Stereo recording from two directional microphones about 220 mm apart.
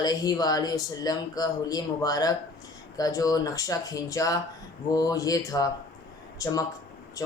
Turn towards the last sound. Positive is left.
turn(degrees=15)  # may be behind; listen again after turning